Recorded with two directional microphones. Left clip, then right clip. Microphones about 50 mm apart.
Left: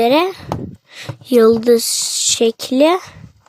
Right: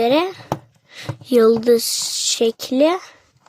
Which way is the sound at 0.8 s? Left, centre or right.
Left.